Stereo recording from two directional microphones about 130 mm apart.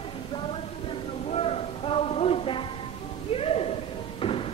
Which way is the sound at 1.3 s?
50° left (ahead or behind).